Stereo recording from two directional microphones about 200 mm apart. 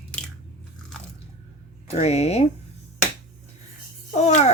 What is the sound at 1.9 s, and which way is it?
Speech, 30° left (ahead or behind).